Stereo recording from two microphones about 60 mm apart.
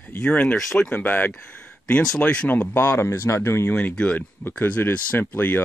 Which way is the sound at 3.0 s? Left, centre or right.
Left.